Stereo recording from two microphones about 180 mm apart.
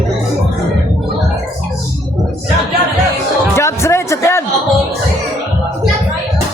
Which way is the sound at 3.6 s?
15° left (ahead or behind).